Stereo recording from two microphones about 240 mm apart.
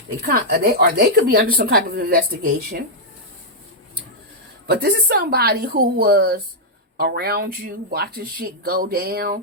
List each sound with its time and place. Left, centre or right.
0.3 s speech: right
4.6 s speech: right